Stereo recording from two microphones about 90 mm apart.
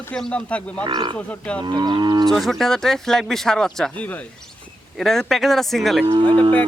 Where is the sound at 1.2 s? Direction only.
15° left (ahead or behind).